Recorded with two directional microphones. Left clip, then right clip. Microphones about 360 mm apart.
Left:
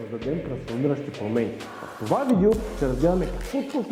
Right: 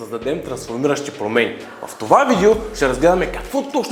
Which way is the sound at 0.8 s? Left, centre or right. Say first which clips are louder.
Right 8 dB; centre.